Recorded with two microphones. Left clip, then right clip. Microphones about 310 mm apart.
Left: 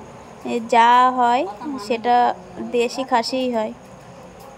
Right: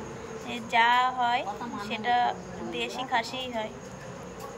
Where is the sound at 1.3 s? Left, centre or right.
Centre.